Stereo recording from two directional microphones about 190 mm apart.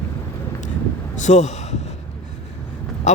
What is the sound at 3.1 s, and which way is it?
Speech, 40° left (ahead or behind).